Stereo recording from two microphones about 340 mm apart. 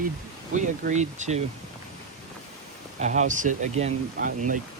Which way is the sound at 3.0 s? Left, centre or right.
Right.